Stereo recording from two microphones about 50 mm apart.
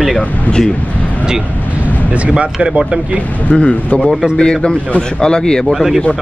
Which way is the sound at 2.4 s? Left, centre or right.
Centre.